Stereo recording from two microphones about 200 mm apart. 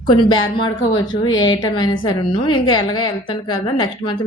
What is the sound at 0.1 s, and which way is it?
A woman's voice, 20° left (ahead or behind).